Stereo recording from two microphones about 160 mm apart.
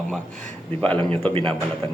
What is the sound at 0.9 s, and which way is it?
Speech, 35° right (ahead or behind).